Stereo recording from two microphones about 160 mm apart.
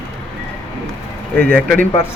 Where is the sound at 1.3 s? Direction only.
10° left (ahead or behind).